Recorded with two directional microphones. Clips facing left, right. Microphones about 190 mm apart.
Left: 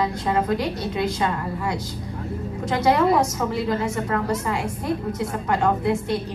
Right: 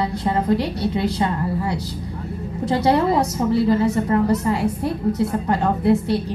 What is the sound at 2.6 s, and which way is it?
A woman's voice, 35° right (ahead or behind).